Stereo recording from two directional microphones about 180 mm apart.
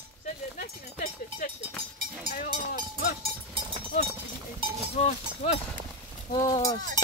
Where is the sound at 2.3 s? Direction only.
55° left (ahead or behind).